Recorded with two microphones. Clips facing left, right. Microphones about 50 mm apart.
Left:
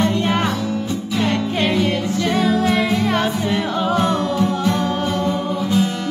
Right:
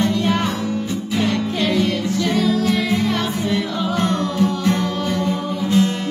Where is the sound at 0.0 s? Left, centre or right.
Left.